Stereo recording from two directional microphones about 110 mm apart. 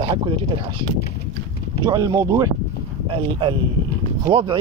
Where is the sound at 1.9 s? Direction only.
40° right (ahead or behind).